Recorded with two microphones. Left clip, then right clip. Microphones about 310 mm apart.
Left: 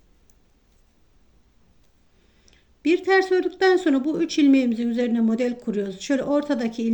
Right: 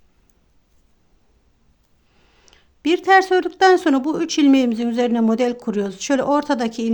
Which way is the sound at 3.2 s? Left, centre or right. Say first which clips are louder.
Right 5 dB; right.